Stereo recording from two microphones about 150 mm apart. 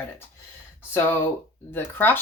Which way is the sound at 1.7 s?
15° left (ahead or behind).